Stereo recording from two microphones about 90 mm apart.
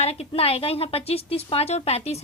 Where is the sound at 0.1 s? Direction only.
90° left.